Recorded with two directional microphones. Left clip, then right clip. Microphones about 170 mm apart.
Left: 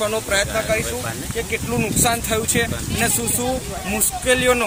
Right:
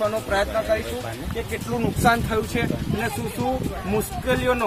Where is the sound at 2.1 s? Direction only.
20° left (ahead or behind).